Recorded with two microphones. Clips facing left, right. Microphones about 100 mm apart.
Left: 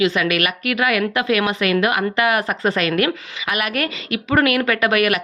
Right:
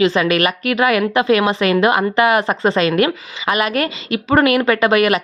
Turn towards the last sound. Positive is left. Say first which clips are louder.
# right 4 dB
turn(degrees=-25)  # may be behind; listen again after turning